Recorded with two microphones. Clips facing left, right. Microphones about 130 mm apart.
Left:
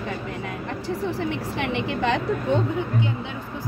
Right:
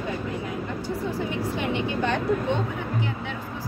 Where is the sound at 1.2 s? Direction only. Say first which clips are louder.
Even; 80° left.